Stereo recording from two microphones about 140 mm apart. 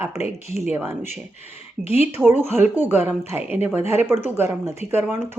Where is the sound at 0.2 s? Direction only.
50° left (ahead or behind).